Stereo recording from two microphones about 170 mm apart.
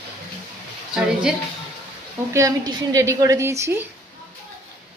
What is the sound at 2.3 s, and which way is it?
Speech, 20° right (ahead or behind).